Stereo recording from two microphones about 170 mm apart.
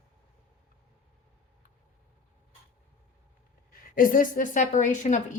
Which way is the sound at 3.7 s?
55° left (ahead or behind).